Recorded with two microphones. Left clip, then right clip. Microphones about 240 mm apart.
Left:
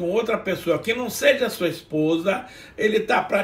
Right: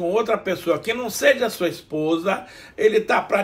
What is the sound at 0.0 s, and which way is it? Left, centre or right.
A man's voice, centre.